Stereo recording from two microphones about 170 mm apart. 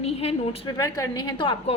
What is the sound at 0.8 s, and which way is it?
Speech, 20° left (ahead or behind).